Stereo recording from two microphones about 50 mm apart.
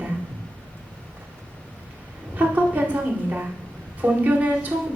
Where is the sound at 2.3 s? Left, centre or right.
Right.